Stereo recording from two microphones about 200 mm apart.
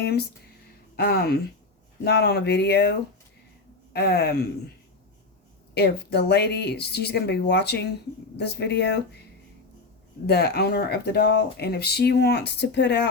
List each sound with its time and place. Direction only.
0.0 s speech: 50° left (ahead or behind)
3.9 s speech: 55° left (ahead or behind)
5.7 s speech: 55° left (ahead or behind)
10.2 s speech: 55° left (ahead or behind)